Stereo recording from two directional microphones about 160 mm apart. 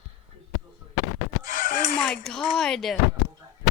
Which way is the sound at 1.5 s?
60° left (ahead or behind).